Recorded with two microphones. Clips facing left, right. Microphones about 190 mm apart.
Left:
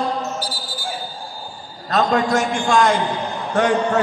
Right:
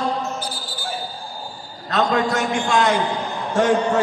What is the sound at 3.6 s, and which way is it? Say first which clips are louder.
Speech: even; 65° left (ahead or behind).